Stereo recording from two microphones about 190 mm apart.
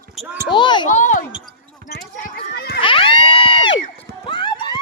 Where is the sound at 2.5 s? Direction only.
55° left (ahead or behind).